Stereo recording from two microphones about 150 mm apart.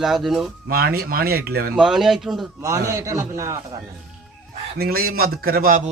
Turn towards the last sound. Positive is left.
turn(degrees=-65)  # may be behind; listen again after turning